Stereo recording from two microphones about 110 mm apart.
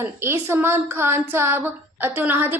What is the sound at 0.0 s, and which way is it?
A woman's voice, 25° right (ahead or behind).